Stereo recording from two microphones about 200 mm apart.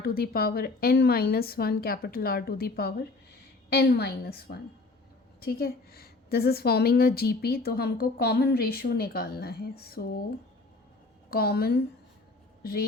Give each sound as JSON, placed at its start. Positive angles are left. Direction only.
{"t": 0.0, "sound": "a woman's voice", "side_deg": 50}
{"t": 11.3, "sound": "a woman's voice", "side_deg": 50}